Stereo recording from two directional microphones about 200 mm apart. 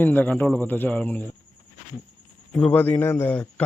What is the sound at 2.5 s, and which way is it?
Speech, 5° left (ahead or behind).